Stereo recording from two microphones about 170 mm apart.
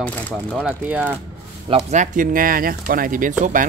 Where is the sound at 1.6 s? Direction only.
40° right (ahead or behind).